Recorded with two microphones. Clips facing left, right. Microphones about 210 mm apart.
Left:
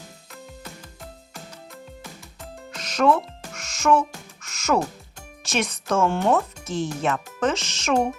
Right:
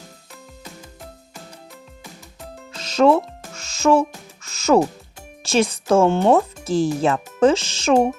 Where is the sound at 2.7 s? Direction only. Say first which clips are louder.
Right 5 dB; 25° right (ahead or behind).